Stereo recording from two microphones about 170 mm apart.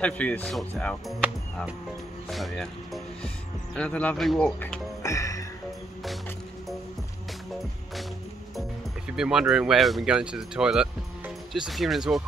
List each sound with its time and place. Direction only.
0.0 s speech: 5° left (ahead or behind)
2.2 s speech: centre (ahead or behind)
5.0 s music: 20° left (ahead or behind)
8.5 s speech: 5° right (ahead or behind)